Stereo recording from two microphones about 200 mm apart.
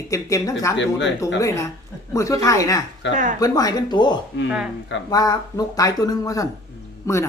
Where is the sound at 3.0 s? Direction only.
65° left (ahead or behind).